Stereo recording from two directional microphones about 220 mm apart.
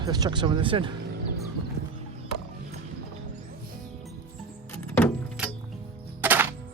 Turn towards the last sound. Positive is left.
turn(degrees=-10)  # may be behind; listen again after turning